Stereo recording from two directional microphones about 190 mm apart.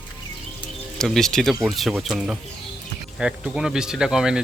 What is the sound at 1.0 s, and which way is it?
Speech, centre (ahead or behind).